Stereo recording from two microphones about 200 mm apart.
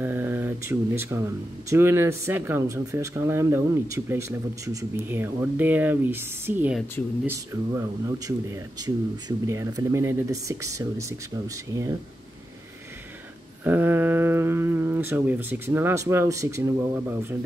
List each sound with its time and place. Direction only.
0.0 s a sound: 10° right (ahead or behind)
1.7 s speech: 10° right (ahead or behind)
13.7 s speech: 10° right (ahead or behind)